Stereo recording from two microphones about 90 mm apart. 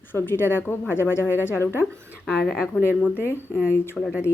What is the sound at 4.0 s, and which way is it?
Speech, 5° left (ahead or behind).